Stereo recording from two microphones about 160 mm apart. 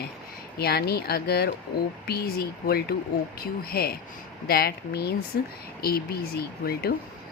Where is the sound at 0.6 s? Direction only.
75° left (ahead or behind).